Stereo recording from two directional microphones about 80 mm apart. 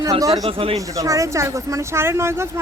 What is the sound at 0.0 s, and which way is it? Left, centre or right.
Speech, right.